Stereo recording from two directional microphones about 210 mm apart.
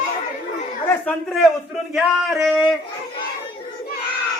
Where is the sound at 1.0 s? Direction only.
Centre (ahead or behind).